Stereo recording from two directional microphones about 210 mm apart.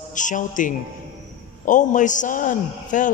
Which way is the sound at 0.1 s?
35° left (ahead or behind).